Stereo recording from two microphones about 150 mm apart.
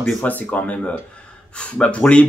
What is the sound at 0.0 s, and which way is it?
Speech, 10° left (ahead or behind).